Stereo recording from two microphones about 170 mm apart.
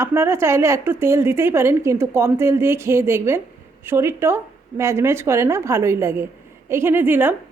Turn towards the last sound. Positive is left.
turn(degrees=-15)  # may be behind; listen again after turning